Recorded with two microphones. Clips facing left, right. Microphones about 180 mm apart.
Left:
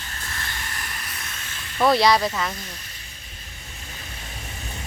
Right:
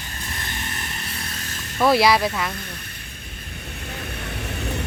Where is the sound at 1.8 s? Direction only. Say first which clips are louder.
Right 1 dB; 5° right (ahead or behind).